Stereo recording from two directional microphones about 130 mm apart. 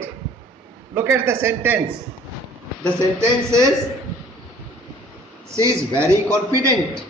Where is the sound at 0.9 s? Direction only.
20° right (ahead or behind).